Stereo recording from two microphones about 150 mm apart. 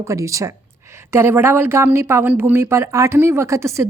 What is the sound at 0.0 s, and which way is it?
Speech, 20° right (ahead or behind).